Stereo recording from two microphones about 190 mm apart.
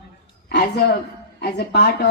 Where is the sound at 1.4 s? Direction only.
60° left (ahead or behind).